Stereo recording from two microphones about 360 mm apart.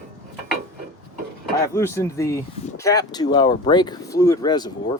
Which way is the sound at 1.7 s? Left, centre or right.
Centre.